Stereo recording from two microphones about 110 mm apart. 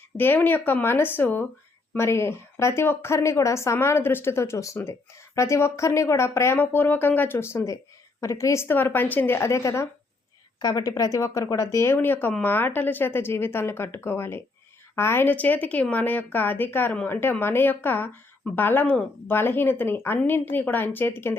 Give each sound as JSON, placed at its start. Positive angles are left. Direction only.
{"t": 0.2, "sound": "a woman's voice", "side_deg": 20}
{"t": 10.6, "sound": "a woman's voice", "side_deg": 40}